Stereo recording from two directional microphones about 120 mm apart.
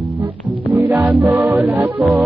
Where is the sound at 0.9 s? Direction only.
20° right (ahead or behind).